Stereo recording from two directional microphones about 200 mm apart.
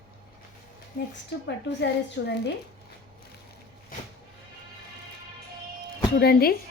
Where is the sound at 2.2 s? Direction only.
60° left (ahead or behind).